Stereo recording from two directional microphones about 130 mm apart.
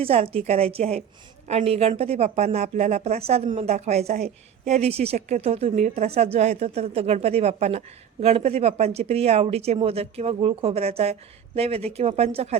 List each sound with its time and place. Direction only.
0.0 s a woman's voice: 50° right (ahead or behind)